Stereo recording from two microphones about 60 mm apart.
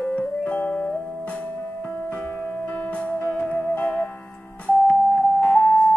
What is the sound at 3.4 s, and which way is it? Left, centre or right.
Music, left.